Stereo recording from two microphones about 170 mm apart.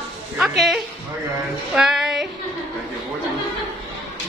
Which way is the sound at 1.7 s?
5° right (ahead or behind).